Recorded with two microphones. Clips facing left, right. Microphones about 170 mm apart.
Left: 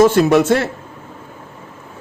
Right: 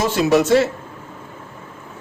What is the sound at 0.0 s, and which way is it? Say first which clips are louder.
Speech: left 5 dB; 55° left (ahead or behind).